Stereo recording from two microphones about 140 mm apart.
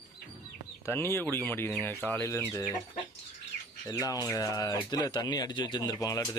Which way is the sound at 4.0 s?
25° left (ahead or behind).